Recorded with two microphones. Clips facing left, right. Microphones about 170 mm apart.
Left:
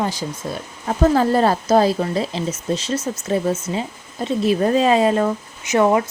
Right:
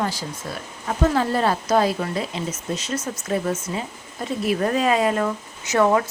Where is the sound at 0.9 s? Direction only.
40° left (ahead or behind).